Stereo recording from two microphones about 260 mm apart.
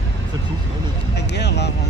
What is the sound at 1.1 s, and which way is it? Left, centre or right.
Speech, left.